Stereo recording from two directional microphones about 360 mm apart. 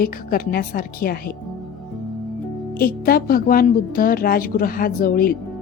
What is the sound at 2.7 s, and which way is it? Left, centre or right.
A woman's voice, left.